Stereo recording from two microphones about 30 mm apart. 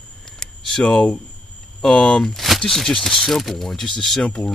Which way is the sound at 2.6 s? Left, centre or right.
Centre.